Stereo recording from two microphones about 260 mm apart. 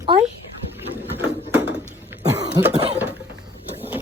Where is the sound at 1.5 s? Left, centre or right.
Centre.